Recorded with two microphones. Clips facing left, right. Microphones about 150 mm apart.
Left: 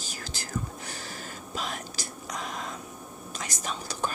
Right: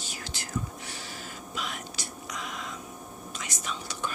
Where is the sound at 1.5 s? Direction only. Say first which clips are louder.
Left 2 dB; 35° left (ahead or behind).